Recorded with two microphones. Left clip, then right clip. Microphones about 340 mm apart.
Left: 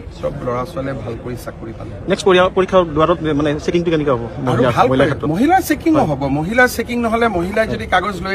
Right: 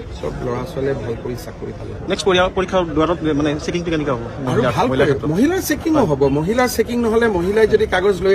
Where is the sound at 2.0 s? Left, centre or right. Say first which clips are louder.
Left 3 dB; left.